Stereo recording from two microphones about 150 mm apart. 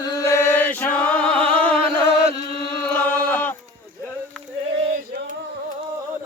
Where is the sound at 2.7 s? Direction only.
15° left (ahead or behind).